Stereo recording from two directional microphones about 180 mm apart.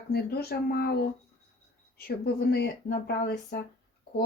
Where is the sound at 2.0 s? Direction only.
60° left (ahead or behind).